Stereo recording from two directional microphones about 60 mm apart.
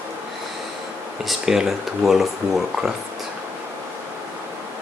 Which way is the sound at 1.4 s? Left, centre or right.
Centre.